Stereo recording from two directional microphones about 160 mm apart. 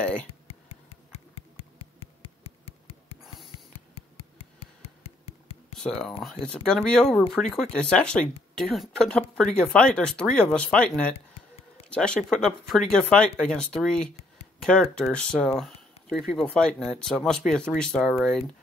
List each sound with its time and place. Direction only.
0.0 s speech: 5° left (ahead or behind)
0.5 s a sound: 40° left (ahead or behind)
5.8 s speech: 5° left (ahead or behind)